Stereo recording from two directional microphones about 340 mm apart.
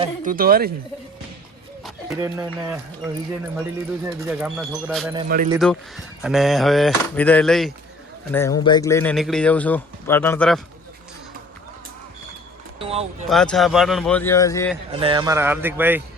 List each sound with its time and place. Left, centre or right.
0.0 s speech: right
1.8 s speech: centre
4.0 s speech: centre
12.8 s a sound: centre
13.2 s speech: centre
14.9 s a man's voice: centre